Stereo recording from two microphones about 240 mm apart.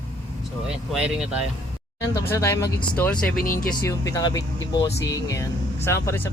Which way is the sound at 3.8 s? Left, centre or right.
Centre.